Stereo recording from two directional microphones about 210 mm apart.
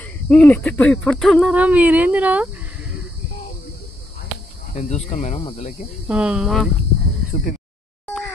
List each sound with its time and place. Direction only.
0.3 s speech: 10° left (ahead or behind)
4.7 s speech: 30° left (ahead or behind)
6.0 s speech: 5° right (ahead or behind)